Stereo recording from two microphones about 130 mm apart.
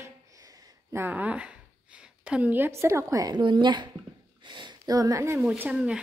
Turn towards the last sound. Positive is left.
turn(degrees=-10)  # may be behind; listen again after turning